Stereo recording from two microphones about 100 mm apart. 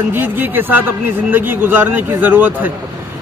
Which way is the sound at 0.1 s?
20° right (ahead or behind).